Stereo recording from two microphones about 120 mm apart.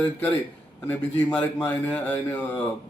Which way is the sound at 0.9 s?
15° left (ahead or behind).